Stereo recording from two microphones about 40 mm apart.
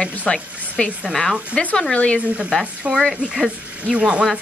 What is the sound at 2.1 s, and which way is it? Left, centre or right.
Speech, right.